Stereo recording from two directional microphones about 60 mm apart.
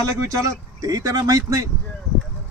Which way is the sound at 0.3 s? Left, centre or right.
Right.